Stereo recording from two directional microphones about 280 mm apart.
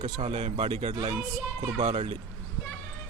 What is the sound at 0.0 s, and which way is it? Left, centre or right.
Speech, right.